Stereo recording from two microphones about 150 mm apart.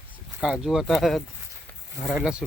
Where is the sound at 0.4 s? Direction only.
5° right (ahead or behind).